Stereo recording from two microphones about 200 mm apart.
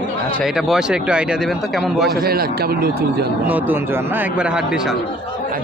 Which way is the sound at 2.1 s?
50° right (ahead or behind).